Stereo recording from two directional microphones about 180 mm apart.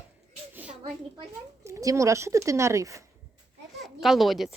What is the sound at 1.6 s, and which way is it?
Speech, 15° right (ahead or behind).